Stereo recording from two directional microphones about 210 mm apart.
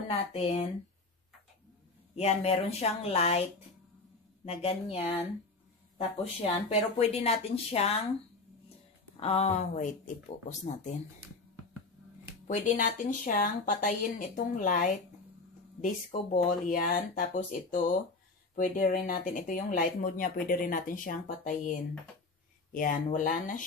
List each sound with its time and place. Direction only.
0.3 s speech: 30° left (ahead or behind)
2.1 s speech: 30° left (ahead or behind)
4.5 s speech: 30° left (ahead or behind)
9.1 s speech: 30° left (ahead or behind)
12.4 s speech: 35° left (ahead or behind)